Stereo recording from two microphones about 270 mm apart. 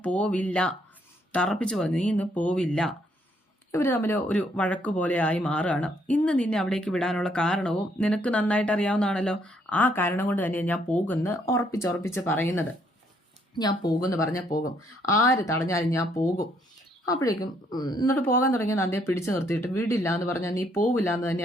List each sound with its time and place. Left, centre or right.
0.0 s speech: centre